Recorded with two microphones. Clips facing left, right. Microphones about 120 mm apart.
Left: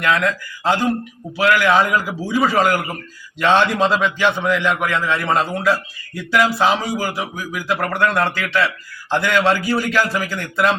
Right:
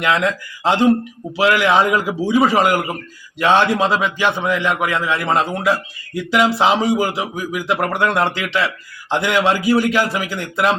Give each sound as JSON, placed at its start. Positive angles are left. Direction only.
{"t": 0.0, "sound": "a man's voice", "side_deg": -20}